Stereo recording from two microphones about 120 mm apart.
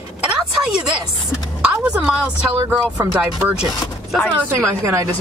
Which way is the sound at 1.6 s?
5° right (ahead or behind).